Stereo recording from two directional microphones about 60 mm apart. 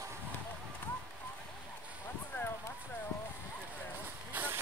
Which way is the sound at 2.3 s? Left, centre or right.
Left.